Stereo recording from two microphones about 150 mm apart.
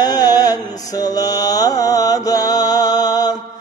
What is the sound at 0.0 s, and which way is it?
Mantra, 25° left (ahead or behind).